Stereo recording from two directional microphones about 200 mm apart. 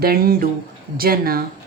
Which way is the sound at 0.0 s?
50° right (ahead or behind).